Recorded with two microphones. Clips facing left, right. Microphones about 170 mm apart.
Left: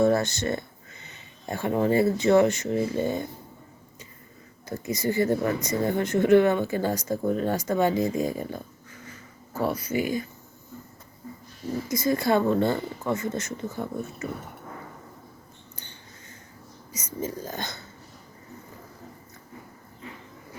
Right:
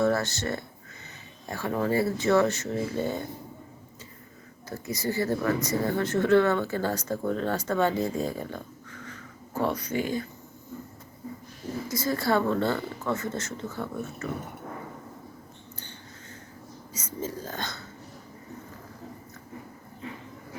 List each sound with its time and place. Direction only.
0.0 s speech: 20° left (ahead or behind)
4.7 s speech: 20° left (ahead or behind)
11.9 s speech: 15° left (ahead or behind)
16.9 s speech: 15° left (ahead or behind)